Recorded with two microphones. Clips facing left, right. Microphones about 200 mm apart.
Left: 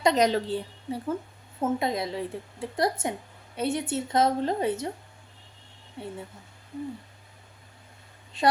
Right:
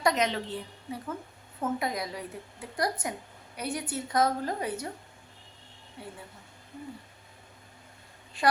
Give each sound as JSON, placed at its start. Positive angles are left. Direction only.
{"t": 0.0, "sound": "a woman's voice", "side_deg": 35}
{"t": 6.0, "sound": "a woman's voice", "side_deg": 25}
{"t": 8.3, "sound": "a woman's voice", "side_deg": 25}